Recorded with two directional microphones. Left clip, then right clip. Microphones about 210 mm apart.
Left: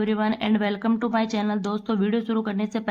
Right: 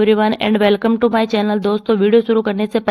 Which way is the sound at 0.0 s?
30° right (ahead or behind).